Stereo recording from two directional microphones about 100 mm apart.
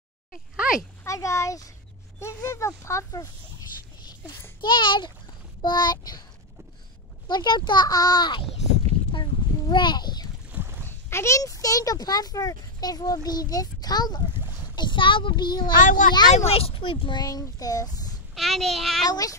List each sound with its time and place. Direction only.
0.6 s speech: 5° right (ahead or behind)
1.0 s speech: 30° left (ahead or behind)
4.6 s a child's voice: 50° left (ahead or behind)
7.2 s a child's voice: 45° left (ahead or behind)
9.1 s a sound: 50° left (ahead or behind)
10.5 s a sound: 25° right (ahead or behind)
10.9 s speech: 25° left (ahead or behind); by 14.2 s 40° left (ahead or behind)
14.8 s a child's voice: 55° left (ahead or behind)
16.4 s speech: 75° left (ahead or behind); by 17.2 s 60° left (ahead or behind)
17.2 s speech: 40° left (ahead or behind)
18.3 s a child's voice: centre (ahead or behind)
19.0 s speech: 40° left (ahead or behind)